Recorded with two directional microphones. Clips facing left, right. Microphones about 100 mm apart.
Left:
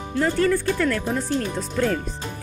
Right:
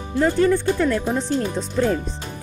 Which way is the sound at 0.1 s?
20° right (ahead or behind).